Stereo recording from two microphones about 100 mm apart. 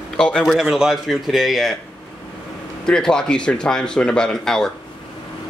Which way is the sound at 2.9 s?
5° left (ahead or behind).